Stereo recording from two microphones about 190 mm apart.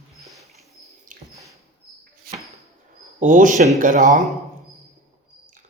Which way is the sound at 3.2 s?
40° right (ahead or behind).